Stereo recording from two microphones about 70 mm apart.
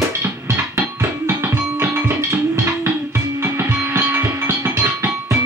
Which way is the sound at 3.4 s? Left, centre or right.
Right.